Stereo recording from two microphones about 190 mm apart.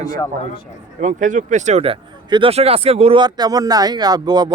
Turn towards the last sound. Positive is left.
turn(degrees=-20)  # may be behind; listen again after turning